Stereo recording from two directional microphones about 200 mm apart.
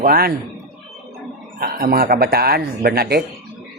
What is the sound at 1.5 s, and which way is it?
Speech, 50° right (ahead or behind).